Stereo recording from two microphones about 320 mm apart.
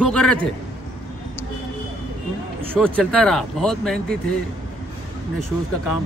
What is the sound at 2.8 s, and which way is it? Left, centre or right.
Speech, centre.